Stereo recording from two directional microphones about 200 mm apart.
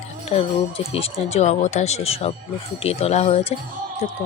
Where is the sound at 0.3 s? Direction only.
25° left (ahead or behind).